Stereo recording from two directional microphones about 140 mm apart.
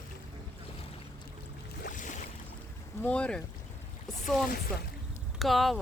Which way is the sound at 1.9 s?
65° left (ahead or behind).